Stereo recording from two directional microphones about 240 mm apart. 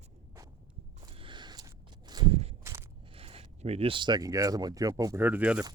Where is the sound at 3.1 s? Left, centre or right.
Right.